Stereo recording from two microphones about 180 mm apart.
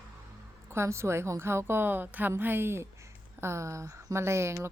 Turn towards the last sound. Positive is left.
turn(degrees=-15)  # may be behind; listen again after turning